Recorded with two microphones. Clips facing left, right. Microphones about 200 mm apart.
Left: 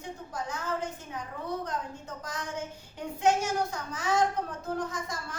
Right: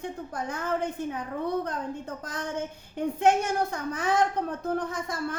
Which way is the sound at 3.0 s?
60° right (ahead or behind).